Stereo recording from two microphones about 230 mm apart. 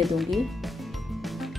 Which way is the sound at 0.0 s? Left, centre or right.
Centre.